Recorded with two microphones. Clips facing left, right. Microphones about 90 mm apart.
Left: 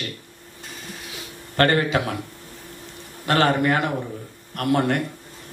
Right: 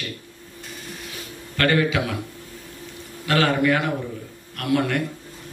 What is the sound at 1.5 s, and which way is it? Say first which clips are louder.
Speech: left 1 dB; 40° left (ahead or behind).